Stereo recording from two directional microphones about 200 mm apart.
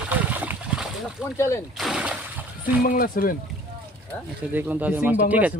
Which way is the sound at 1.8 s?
5° right (ahead or behind).